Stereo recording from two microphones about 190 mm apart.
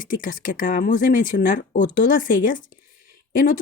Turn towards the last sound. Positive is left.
turn(degrees=45)  # may be behind; listen again after turning